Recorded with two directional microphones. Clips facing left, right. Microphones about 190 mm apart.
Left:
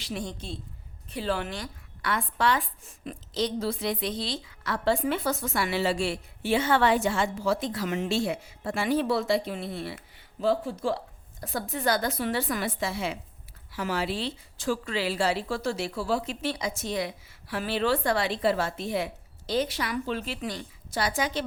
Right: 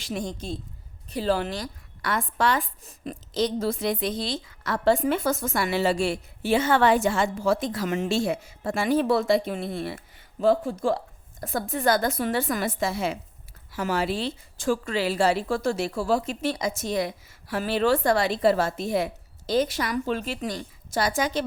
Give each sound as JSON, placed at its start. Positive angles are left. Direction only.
{"t": 0.0, "sound": "speech", "side_deg": -45}